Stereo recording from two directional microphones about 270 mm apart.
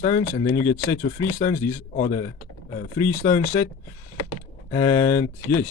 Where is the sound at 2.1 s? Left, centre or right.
Left.